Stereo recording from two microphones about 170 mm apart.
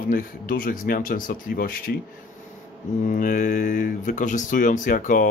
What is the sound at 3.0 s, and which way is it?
Speech, 50° left (ahead or behind).